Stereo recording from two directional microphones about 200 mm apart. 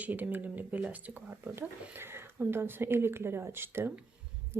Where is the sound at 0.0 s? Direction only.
10° right (ahead or behind).